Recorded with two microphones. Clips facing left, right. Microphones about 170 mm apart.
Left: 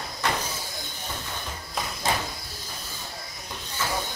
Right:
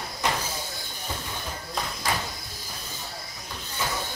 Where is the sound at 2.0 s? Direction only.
25° left (ahead or behind).